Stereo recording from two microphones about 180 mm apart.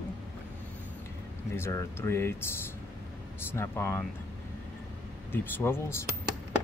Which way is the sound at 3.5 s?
15° left (ahead or behind).